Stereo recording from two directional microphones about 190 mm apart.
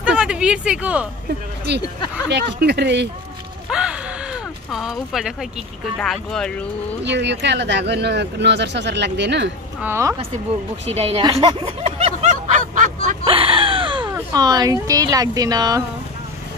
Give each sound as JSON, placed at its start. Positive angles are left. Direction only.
{"t": 0.0, "sound": "speech", "side_deg": -5}
{"t": 2.2, "sound": "speech", "side_deg": -65}
{"t": 3.7, "sound": "a sound", "side_deg": -5}
{"t": 5.9, "sound": "speech", "side_deg": 5}
{"t": 7.1, "sound": "speech", "side_deg": -65}
{"t": 9.8, "sound": "speech", "side_deg": -10}
{"t": 10.9, "sound": "a sound", "side_deg": -30}
{"t": 13.2, "sound": "a sound", "side_deg": -30}
{"t": 14.1, "sound": "speech", "side_deg": -20}